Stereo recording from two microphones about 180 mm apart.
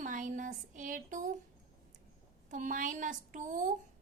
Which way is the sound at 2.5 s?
45° right (ahead or behind).